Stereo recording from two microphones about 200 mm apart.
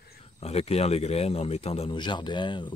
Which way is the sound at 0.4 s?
30° left (ahead or behind).